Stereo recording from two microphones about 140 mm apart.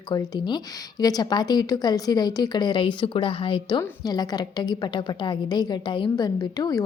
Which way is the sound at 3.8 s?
30° left (ahead or behind).